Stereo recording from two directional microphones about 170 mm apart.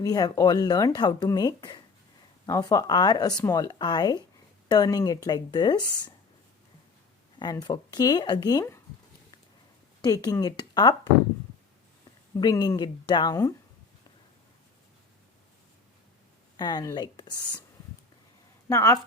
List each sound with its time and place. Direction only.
0.0 s speech: 20° left (ahead or behind)
7.3 s speech: 25° left (ahead or behind)
10.0 s speech: 20° left (ahead or behind)
12.4 s speech: 25° left (ahead or behind)
16.6 s speech: 25° left (ahead or behind)
18.7 s a woman's voice: 15° left (ahead or behind)